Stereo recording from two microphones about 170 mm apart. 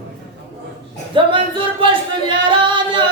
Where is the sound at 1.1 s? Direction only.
30° right (ahead or behind).